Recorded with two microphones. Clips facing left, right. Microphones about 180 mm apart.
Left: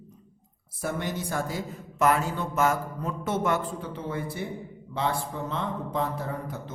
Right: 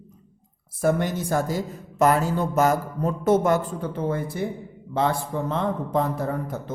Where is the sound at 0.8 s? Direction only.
45° right (ahead or behind).